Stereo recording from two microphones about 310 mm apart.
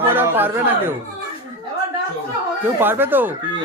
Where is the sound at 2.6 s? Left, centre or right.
Centre.